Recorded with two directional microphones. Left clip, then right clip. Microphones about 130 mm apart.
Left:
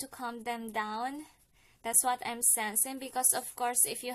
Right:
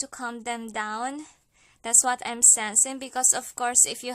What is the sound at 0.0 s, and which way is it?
A woman's voice, 35° right (ahead or behind).